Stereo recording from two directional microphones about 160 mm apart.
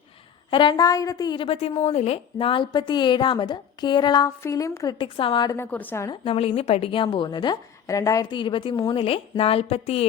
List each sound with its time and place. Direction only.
0.5 s a woman's voice: 30° left (ahead or behind)
5.5 s a woman's voice: 10° left (ahead or behind)
6.2 s a woman's voice: 35° left (ahead or behind)